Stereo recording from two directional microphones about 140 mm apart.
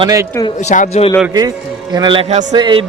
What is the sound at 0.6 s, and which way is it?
Speech, 60° left (ahead or behind).